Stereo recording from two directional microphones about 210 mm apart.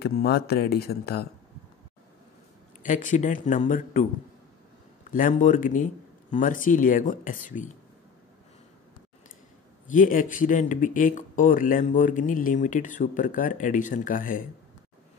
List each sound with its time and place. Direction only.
0.0 s speech: 50° left (ahead or behind)
2.8 s speech: 40° left (ahead or behind)
5.1 s speech: 40° left (ahead or behind)
9.8 s speech: 40° left (ahead or behind)